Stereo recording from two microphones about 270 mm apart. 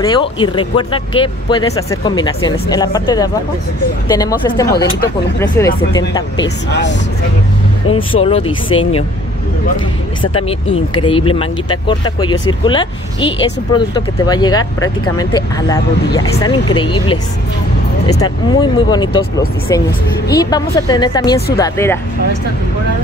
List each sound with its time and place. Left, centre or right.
0.0 s speech: centre
6.7 s speech: left
8.2 s speech: left
10.3 s speech: centre
18.0 s speech: centre